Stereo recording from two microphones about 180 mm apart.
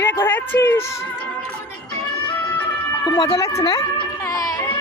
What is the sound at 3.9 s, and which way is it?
Baby cry, 20° left (ahead or behind).